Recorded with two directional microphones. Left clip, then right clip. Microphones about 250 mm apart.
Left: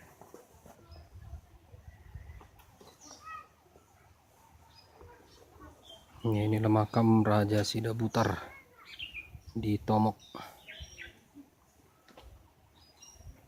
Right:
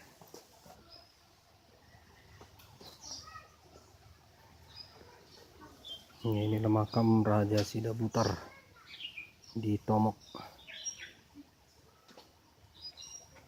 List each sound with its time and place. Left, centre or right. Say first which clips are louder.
6.2 s speech: left 2 dB; centre
9.6 s speech: left 2 dB; centre